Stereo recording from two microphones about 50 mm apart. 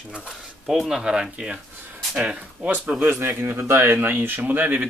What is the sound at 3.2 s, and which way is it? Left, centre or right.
Speech, right.